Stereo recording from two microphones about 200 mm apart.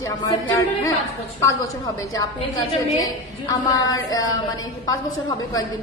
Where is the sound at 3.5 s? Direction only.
20° left (ahead or behind).